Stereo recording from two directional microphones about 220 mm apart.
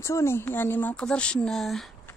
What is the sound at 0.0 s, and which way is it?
Speech, 10° left (ahead or behind).